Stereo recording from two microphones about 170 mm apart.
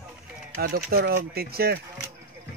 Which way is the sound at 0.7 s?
75° right (ahead or behind).